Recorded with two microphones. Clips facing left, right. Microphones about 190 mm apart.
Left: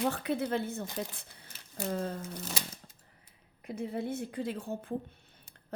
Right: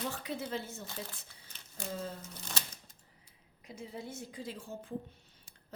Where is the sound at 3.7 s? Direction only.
60° left (ahead or behind).